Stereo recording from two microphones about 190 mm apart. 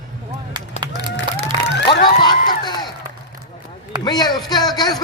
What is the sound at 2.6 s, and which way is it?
Speech, 20° left (ahead or behind).